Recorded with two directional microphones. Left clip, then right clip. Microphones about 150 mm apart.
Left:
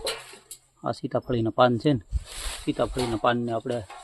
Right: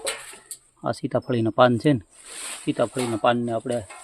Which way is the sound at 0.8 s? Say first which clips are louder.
Right 3 dB; 25° right (ahead or behind).